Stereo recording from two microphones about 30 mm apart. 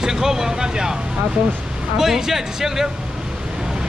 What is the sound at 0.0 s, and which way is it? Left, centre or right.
Speech, centre.